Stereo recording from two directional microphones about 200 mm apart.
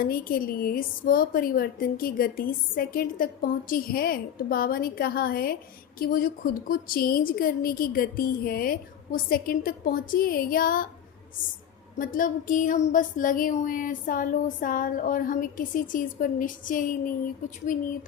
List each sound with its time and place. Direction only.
0.0 s a woman's voice: 45° left (ahead or behind)
11.9 s a woman's voice: 40° left (ahead or behind)